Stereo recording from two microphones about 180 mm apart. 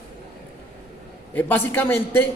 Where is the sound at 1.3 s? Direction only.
10° left (ahead or behind).